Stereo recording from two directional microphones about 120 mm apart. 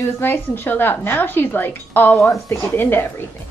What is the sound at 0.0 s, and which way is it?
Speech, 15° left (ahead or behind).